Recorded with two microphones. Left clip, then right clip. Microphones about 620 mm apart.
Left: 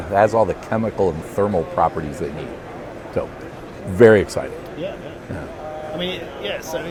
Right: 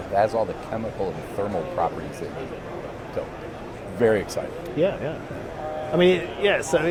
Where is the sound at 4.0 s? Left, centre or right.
Left.